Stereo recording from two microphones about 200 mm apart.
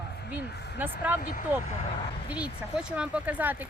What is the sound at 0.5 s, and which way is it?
Speech, 55° left (ahead or behind).